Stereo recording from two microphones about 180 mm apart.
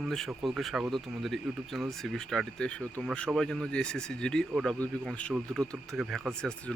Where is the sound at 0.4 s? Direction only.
Centre (ahead or behind).